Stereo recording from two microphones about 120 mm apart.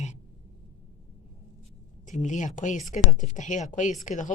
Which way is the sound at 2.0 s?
90° left.